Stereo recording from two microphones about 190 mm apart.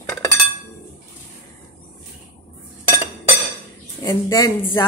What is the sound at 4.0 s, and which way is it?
Speech, 20° left (ahead or behind).